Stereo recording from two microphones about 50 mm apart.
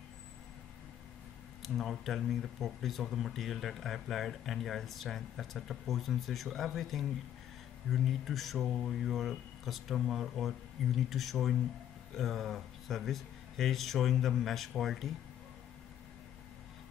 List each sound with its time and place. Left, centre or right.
1.6 s speech: centre